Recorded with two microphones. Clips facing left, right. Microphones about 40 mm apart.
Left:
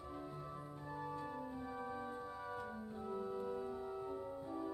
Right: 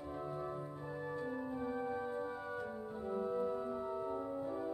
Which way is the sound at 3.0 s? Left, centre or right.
Centre.